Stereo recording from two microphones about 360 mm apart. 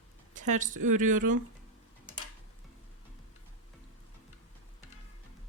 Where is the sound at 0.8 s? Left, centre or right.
Right.